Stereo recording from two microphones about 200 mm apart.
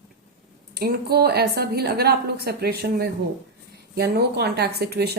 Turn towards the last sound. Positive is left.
turn(degrees=-55)  # may be behind; listen again after turning